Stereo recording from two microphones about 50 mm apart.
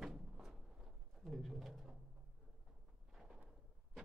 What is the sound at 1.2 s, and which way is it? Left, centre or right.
Pigeon, centre.